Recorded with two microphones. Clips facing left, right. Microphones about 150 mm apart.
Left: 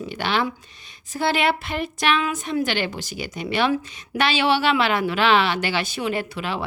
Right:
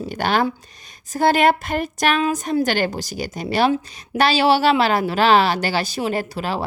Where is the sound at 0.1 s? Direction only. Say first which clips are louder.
Right 4 dB; 45° right (ahead or behind).